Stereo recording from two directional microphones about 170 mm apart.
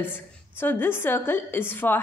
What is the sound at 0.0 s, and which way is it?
A woman's voice, 10° left (ahead or behind).